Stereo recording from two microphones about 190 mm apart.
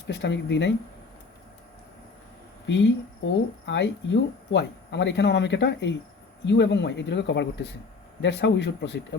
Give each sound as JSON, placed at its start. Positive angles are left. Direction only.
{"t": 0.1, "sound": "speech", "side_deg": 65}
{"t": 2.6, "sound": "speech", "side_deg": 70}